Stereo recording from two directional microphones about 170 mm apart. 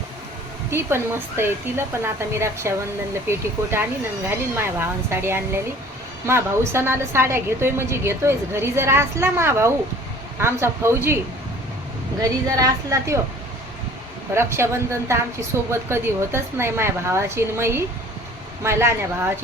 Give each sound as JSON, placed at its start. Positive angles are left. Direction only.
{"t": 0.7, "sound": "a woman's voice", "side_deg": -15}
{"t": 12.2, "sound": "a woman's voice", "side_deg": -20}
{"t": 14.3, "sound": "a woman's voice", "side_deg": -15}